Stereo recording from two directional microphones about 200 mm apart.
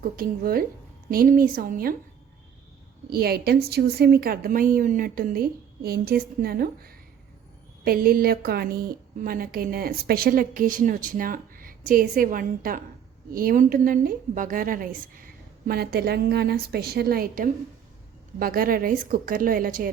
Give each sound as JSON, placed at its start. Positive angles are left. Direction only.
{"t": 0.2, "sound": "a woman's voice", "side_deg": -45}
{"t": 3.1, "sound": "a woman's voice", "side_deg": -50}